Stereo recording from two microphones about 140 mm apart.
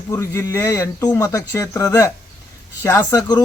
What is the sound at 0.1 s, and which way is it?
Speech, 20° left (ahead or behind).